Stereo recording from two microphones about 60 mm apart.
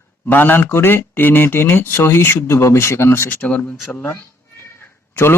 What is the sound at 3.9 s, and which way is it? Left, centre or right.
Speech, left.